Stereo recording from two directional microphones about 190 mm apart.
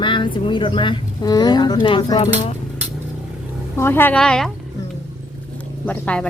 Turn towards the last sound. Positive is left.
turn(degrees=5)  # may be behind; listen again after turning